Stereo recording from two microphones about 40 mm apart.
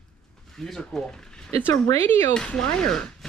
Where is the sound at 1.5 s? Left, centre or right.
Left.